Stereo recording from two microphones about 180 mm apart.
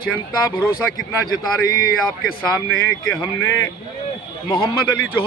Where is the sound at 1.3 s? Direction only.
25° left (ahead or behind).